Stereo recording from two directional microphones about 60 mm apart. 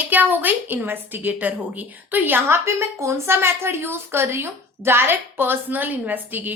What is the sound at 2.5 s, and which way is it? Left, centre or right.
A woman's voice, right.